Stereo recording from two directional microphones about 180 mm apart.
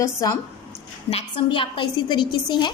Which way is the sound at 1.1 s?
30° left (ahead or behind).